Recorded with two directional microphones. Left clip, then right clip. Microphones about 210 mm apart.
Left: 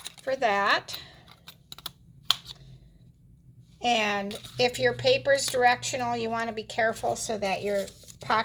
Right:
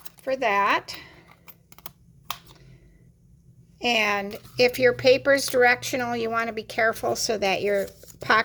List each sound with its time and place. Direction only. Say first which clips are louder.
0.3 s speech: right 2 dB; 20° right (ahead or behind)
1.8 s computer keyboard: left 6 dB; 5° right (ahead or behind)
3.8 s speech: right 3 dB; 30° right (ahead or behind); by 8.4 s 50° right (ahead or behind)